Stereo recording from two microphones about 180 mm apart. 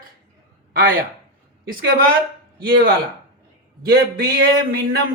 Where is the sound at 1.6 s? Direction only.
55° right (ahead or behind).